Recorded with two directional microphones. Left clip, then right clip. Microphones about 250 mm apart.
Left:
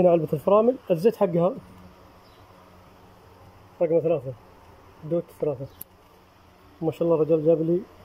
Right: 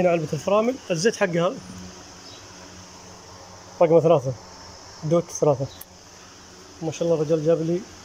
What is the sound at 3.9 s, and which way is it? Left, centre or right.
Speech, right.